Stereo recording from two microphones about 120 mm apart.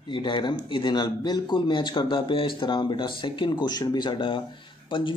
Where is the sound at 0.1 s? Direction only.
40° left (ahead or behind).